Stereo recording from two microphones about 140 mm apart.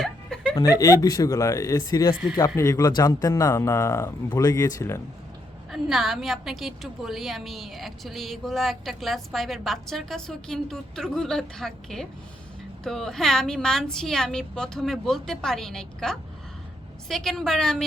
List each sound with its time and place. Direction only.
0.0 s chuckle: 5° left (ahead or behind)
0.5 s speech: 25° left (ahead or behind)
5.7 s a woman's voice: centre (ahead or behind)